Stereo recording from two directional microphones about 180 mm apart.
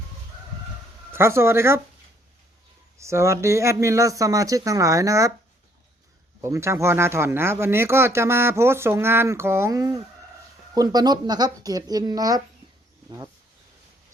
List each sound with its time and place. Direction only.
1.1 s speech: 15° right (ahead or behind)
3.0 s speech: 15° right (ahead or behind)
6.4 s speech: 15° right (ahead or behind)